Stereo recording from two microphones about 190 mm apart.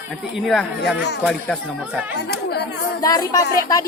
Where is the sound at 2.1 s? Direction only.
60° left (ahead or behind).